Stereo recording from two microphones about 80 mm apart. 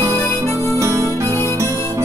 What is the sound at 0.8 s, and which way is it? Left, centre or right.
Music, right.